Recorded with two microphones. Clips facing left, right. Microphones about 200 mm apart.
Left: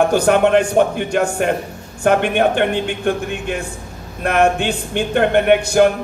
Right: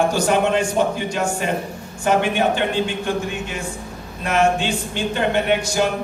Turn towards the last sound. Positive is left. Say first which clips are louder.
# left 7 dB
turn(degrees=60)  # may be behind; listen again after turning